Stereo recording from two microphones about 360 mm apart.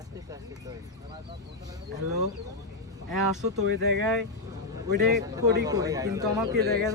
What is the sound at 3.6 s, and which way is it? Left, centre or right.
Speech, right.